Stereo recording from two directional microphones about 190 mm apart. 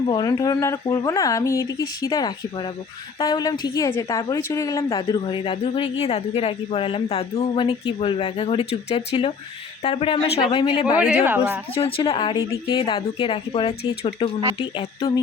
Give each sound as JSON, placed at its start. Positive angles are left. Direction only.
{"t": 0.1, "sound": "a woman's voice", "side_deg": 20}
{"t": 4.9, "sound": "a woman's voice", "side_deg": 30}
{"t": 10.9, "sound": "speech", "side_deg": -5}
{"t": 11.7, "sound": "a woman's voice", "side_deg": 30}